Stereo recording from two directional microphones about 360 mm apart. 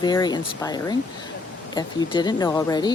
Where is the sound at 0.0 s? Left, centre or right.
Centre.